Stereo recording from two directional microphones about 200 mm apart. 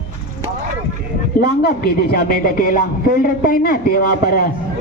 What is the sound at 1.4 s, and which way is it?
A man's voice, 50° left (ahead or behind).